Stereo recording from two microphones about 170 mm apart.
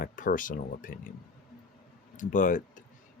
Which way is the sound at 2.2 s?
50° left (ahead or behind).